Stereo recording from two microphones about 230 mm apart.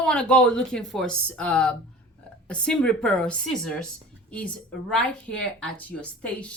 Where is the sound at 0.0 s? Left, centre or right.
Centre.